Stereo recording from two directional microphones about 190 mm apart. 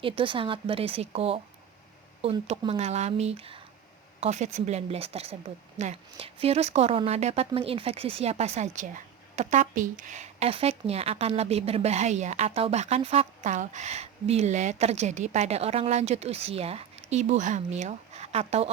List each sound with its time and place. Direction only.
0.0 s speech: 25° right (ahead or behind)